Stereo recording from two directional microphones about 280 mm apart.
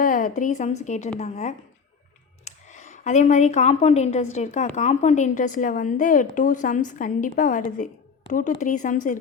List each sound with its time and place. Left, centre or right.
0.0 s a woman's voice: left